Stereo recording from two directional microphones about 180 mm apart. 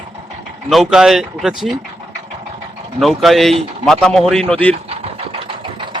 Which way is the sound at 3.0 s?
Centre (ahead or behind).